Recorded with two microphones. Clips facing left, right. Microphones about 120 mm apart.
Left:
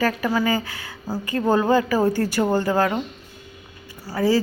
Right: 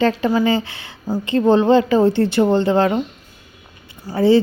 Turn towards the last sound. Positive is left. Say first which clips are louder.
# right 6 dB
turn(degrees=-25)  # may be behind; listen again after turning